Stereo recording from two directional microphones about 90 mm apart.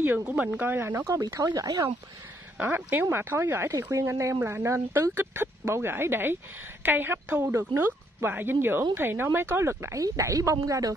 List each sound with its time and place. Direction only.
0.0 s speech: 20° right (ahead or behind)
1.4 s speech: 50° right (ahead or behind)
2.5 s a woman's voice: 20° right (ahead or behind); by 11.0 s 40° right (ahead or behind)